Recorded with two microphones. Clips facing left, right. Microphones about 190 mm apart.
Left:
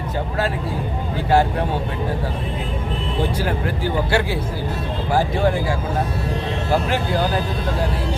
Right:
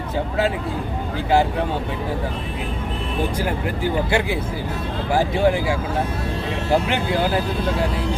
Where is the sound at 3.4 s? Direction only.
15° right (ahead or behind).